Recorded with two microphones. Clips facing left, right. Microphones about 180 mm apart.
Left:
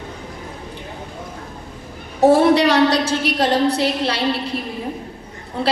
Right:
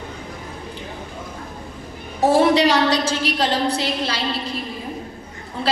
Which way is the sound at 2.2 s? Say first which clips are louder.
Left 3 dB; 60° left (ahead or behind).